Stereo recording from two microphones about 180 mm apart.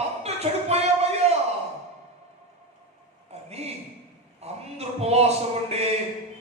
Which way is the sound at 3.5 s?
35° right (ahead or behind).